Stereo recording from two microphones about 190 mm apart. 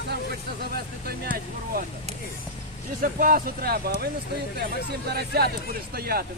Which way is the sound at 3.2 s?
50° right (ahead or behind).